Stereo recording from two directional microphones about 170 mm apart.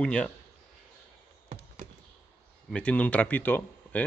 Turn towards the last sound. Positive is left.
turn(degrees=10)  # may be behind; listen again after turning